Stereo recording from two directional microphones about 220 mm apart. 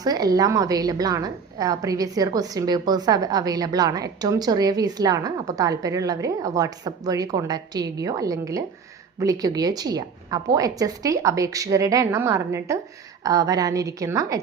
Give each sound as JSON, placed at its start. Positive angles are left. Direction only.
{"t": 0.0, "sound": "a woman's voice", "side_deg": -15}